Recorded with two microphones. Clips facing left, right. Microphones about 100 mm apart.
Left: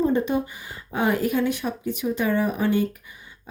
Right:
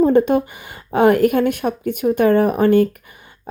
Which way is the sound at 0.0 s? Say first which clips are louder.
Right 8 dB; 60° right (ahead or behind).